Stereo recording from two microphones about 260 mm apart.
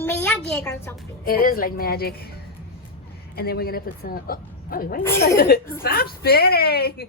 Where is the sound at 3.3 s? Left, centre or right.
Left.